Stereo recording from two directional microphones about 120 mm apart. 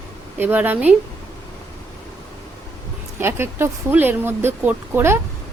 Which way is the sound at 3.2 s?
20° right (ahead or behind).